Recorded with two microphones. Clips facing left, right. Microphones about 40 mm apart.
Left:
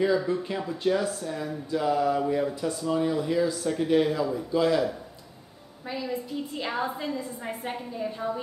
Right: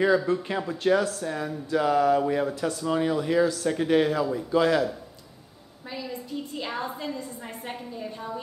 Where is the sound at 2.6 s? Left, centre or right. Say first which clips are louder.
Right 1 dB; right.